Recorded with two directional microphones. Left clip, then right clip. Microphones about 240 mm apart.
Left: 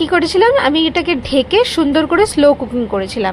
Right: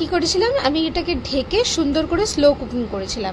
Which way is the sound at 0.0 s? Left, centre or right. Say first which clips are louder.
Left 7 dB; centre.